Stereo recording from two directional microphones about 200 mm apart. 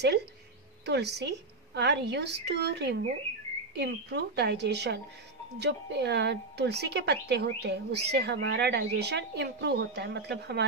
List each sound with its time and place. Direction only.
0.8 s a woman's voice: 55° right (ahead or behind)